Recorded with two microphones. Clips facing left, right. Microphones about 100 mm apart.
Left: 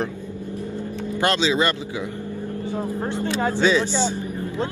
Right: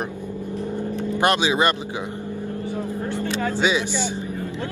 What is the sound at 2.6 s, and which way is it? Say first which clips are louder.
Speech: left 3 dB; 20° left (ahead or behind).